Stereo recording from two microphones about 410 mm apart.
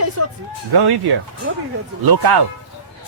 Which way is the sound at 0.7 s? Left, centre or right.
Right.